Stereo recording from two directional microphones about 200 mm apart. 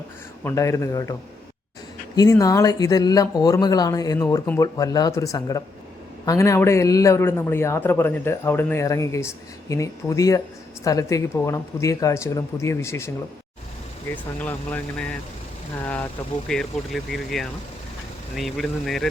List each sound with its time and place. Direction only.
0.4 s a man's voice: 15° left (ahead or behind)
2.1 s a man's voice: 15° left (ahead or behind)
14.3 s a man's voice: 10° left (ahead or behind)